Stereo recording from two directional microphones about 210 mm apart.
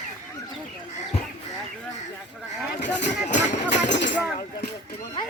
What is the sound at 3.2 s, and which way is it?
Speech, 35° left (ahead or behind).